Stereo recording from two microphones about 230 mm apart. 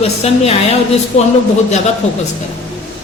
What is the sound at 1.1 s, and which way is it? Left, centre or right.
Speech, left.